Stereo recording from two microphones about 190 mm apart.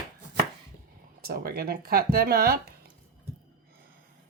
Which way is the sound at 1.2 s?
55° right (ahead or behind).